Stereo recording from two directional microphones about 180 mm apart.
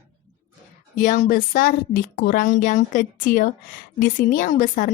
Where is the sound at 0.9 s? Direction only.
45° left (ahead or behind).